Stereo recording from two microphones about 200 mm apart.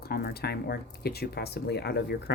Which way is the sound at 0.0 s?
50° left (ahead or behind).